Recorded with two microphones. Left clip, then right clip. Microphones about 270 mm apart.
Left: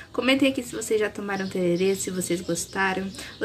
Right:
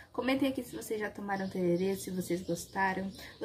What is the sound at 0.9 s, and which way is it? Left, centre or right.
Speech, centre.